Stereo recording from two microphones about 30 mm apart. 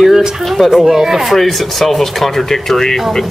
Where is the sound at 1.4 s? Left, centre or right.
Centre.